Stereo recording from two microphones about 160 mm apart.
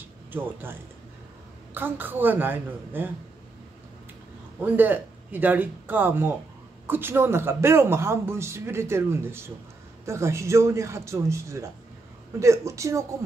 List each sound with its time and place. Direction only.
0.3 s speech: 10° right (ahead or behind)
4.6 s speech: 10° right (ahead or behind)